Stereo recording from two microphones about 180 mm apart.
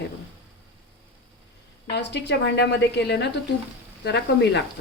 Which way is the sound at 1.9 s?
70° left (ahead or behind).